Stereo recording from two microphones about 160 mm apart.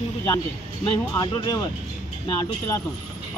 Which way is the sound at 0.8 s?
25° left (ahead or behind).